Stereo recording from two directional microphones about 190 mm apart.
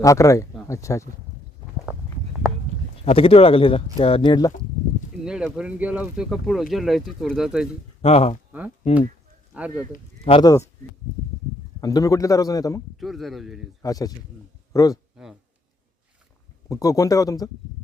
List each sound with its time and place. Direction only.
0.0 s a man's voice: 15° left (ahead or behind)
3.0 s speech: 30° left (ahead or behind)
5.2 s speech: 5° right (ahead or behind)
8.0 s speech: 30° left (ahead or behind)
9.6 s speech: 5° right (ahead or behind)
9.9 s speech: 35° left (ahead or behind)
11.8 s a man's voice: 20° left (ahead or behind)
13.0 s speech: centre (ahead or behind)
13.8 s speech: 20° left (ahead or behind)
15.2 s speech: centre (ahead or behind)
16.6 s a man's voice: 15° left (ahead or behind)